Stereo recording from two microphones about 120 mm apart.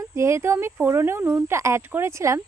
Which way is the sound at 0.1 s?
25° right (ahead or behind).